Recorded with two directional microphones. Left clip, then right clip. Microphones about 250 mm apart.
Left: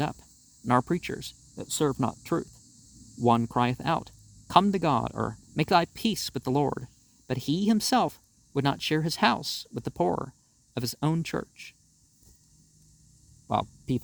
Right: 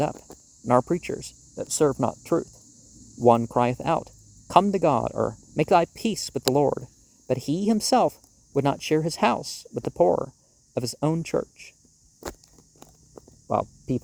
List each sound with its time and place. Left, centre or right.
0.0 s speech: left
13.5 s speech: left